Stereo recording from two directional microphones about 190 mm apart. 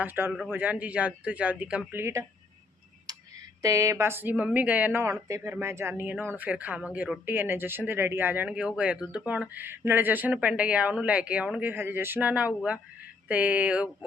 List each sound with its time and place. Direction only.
0.0 s speech: 10° right (ahead or behind)
3.1 s tick: 20° right (ahead or behind)
3.6 s speech: 15° right (ahead or behind)